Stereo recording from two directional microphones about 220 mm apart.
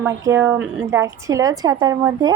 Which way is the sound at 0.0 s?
10° right (ahead or behind).